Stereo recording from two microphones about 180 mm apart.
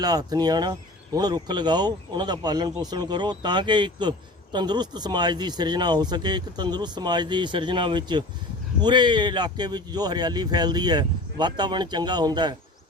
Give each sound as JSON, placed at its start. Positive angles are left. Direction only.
{"t": 0.0, "sound": "speech", "side_deg": -20}